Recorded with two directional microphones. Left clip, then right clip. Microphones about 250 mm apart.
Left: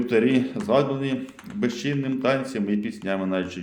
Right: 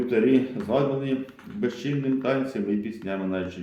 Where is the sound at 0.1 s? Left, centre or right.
Left.